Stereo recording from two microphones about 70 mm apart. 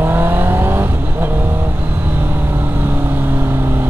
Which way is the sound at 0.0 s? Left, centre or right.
Right.